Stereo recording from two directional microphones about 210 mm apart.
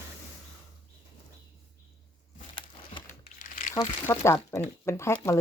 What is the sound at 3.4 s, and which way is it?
Crumpling, 40° left (ahead or behind).